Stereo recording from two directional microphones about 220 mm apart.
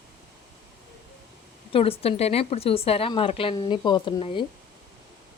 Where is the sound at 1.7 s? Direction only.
25° left (ahead or behind).